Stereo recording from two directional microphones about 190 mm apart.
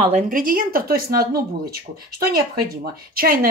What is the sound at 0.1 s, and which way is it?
Speech, 45° right (ahead or behind).